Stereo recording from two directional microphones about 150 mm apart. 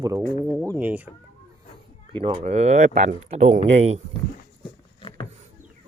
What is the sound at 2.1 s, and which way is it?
Speech, 40° right (ahead or behind).